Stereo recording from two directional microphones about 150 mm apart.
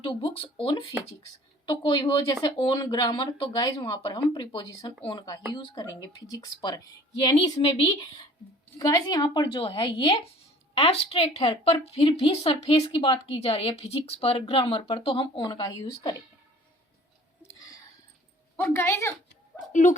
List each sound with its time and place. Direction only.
0.0 s a woman's voice: 35° left (ahead or behind)
7.6 s a woman's voice: 40° left (ahead or behind)
8.8 s a woman's voice: 25° left (ahead or behind)
17.4 s a sound: 20° left (ahead or behind)
18.5 s speech: 15° left (ahead or behind)
19.7 s speech: 55° left (ahead or behind)